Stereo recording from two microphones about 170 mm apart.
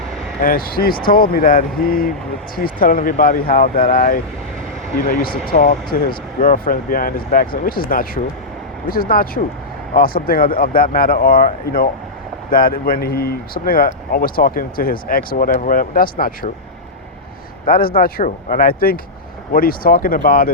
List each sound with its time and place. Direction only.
0.4 s speech: 60° left (ahead or behind)
5.2 s speech: 60° left (ahead or behind)
17.7 s speech: 60° left (ahead or behind)